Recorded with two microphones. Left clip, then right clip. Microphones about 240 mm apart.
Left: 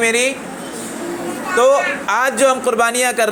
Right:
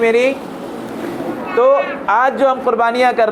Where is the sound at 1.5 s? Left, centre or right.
Left.